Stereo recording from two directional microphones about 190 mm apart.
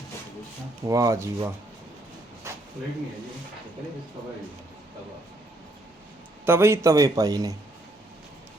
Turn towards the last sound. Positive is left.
turn(degrees=-20)  # may be behind; listen again after turning